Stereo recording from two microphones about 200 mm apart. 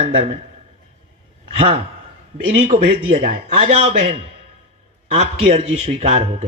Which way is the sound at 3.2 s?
35° right (ahead or behind).